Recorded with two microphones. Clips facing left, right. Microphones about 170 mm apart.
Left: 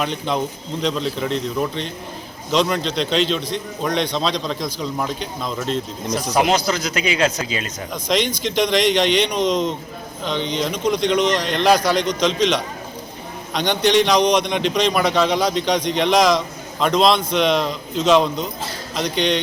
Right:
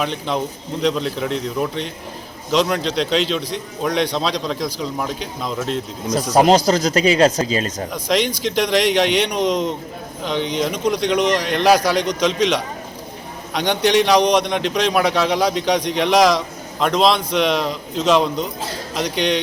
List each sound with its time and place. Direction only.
0.0 s a man's voice: centre (ahead or behind)
6.3 s speech: 35° right (ahead or behind)
8.4 s a man's voice: 5° right (ahead or behind)